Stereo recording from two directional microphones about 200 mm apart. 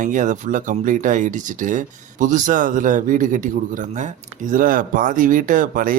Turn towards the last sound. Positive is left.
turn(degrees=-45)  # may be behind; listen again after turning